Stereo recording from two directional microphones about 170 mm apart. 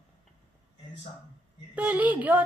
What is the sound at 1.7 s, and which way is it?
Speech, 10° right (ahead or behind).